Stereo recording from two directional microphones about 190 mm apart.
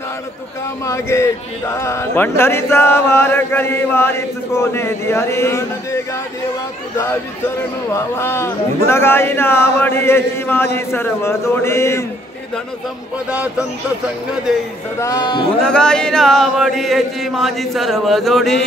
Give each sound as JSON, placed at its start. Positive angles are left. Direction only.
{"t": 0.8, "sound": "speech", "side_deg": 15}
{"t": 7.9, "sound": "speech", "side_deg": 15}
{"t": 15.0, "sound": "speech", "side_deg": 20}
{"t": 15.6, "sound": "chant", "side_deg": 5}